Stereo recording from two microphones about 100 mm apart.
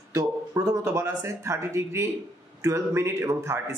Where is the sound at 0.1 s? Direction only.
35° right (ahead or behind).